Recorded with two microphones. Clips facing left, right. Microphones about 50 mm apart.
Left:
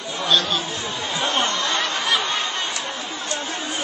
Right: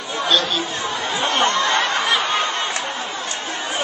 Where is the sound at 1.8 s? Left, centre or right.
Centre.